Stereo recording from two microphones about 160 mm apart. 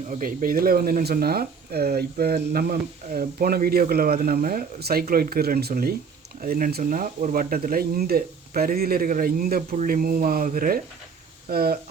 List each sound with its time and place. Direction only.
0.1 s speech: 55° right (ahead or behind)
11.4 s speech: 70° right (ahead or behind)